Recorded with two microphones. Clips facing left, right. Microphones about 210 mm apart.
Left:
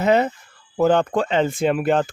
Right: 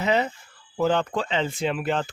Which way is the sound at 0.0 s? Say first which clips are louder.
Left 6 dB; 50° left (ahead or behind).